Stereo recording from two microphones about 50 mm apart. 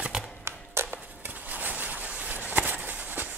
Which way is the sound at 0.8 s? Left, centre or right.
Right.